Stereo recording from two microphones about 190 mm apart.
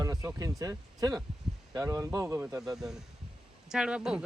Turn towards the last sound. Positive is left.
turn(degrees=-5)  # may be behind; listen again after turning